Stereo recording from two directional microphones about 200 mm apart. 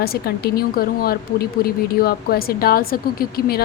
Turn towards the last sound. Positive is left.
turn(degrees=50)  # may be behind; listen again after turning